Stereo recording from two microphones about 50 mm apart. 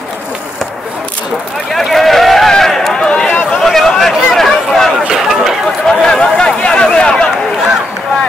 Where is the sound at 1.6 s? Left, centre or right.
Centre.